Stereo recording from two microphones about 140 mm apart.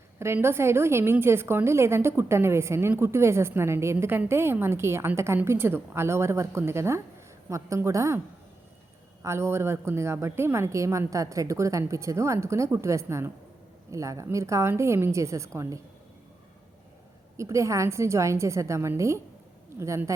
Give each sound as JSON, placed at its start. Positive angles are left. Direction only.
{"t": 0.3, "sound": "a woman's voice", "side_deg": -15}
{"t": 9.2, "sound": "a woman's voice", "side_deg": -20}
{"t": 17.3, "sound": "a woman's voice", "side_deg": -20}